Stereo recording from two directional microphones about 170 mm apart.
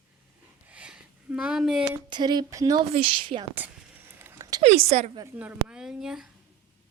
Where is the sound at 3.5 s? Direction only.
10° right (ahead or behind).